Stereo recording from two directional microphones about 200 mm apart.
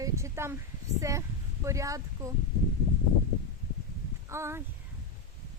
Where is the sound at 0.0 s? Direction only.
15° right (ahead or behind).